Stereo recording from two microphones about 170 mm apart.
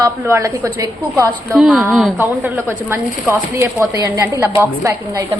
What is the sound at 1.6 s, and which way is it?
Speech, 5° right (ahead or behind).